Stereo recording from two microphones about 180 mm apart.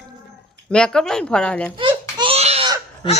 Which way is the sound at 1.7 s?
25° right (ahead or behind).